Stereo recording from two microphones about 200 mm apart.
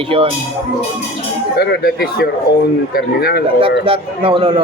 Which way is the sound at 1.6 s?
55° left (ahead or behind).